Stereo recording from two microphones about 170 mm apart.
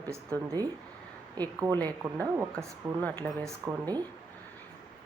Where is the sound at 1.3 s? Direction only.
20° right (ahead or behind).